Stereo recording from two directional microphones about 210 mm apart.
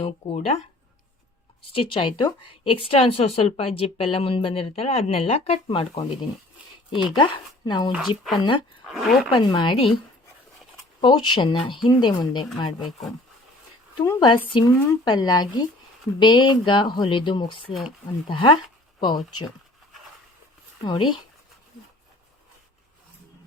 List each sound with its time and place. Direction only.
0.0 s speech: 30° left (ahead or behind)
1.7 s speech: 25° left (ahead or behind)
8.9 s speech: centre (ahead or behind)
9.3 s speech: 20° left (ahead or behind)
11.0 s speech: 20° left (ahead or behind)
14.0 s speech: 15° left (ahead or behind)
20.8 s speech: 20° left (ahead or behind)